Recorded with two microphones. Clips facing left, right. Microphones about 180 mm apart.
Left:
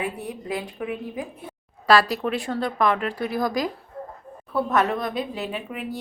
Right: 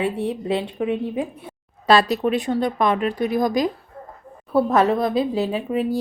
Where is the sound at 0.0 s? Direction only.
30° right (ahead or behind).